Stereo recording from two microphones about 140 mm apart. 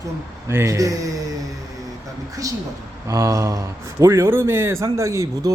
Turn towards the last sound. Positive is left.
turn(degrees=-20)  # may be behind; listen again after turning